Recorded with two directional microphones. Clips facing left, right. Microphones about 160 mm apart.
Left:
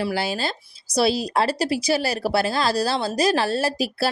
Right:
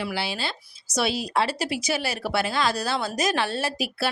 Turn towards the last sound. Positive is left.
turn(degrees=35)  # may be behind; listen again after turning